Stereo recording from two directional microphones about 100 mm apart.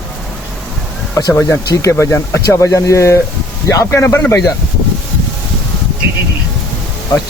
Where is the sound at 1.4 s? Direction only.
30° left (ahead or behind).